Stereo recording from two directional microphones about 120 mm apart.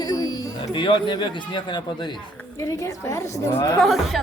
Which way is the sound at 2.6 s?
25° left (ahead or behind).